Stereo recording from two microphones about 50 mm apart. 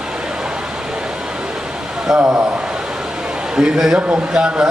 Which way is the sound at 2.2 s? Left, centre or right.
Right.